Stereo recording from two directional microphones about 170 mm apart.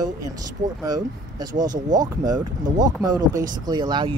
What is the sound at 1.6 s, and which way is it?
Speech, 25° right (ahead or behind).